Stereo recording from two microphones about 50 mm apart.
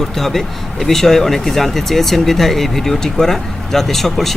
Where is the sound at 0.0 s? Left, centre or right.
Centre.